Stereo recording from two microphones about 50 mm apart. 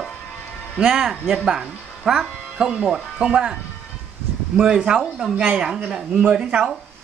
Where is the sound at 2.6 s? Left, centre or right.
Centre.